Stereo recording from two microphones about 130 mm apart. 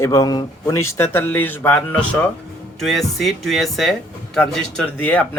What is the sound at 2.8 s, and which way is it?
Speech, centre (ahead or behind).